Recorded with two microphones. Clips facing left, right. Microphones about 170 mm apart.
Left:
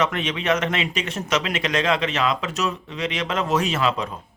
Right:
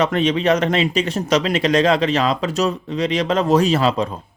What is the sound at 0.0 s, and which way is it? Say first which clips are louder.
Speech: right 6 dB; 35° right (ahead or behind).